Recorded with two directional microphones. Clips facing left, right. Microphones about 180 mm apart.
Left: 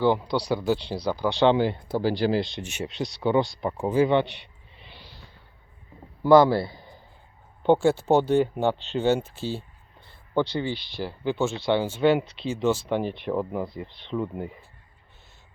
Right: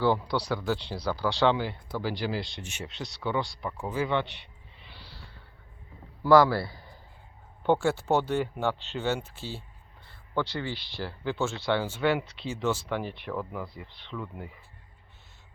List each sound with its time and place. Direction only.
0.0 s speech: 20° left (ahead or behind)
4.9 s a sound: 20° left (ahead or behind)
6.2 s a man's voice: 20° left (ahead or behind)